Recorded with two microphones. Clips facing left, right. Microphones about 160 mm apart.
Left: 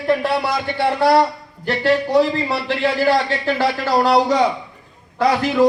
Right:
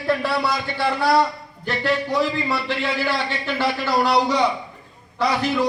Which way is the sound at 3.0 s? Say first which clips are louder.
Left 7 dB; 40° left (ahead or behind).